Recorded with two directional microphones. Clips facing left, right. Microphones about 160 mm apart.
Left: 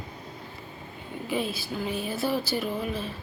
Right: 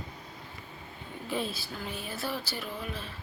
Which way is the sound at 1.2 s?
5° left (ahead or behind).